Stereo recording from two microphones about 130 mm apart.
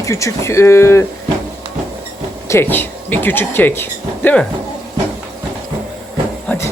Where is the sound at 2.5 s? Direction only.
15° left (ahead or behind).